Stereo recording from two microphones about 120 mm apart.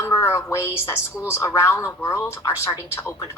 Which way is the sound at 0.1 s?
20° left (ahead or behind).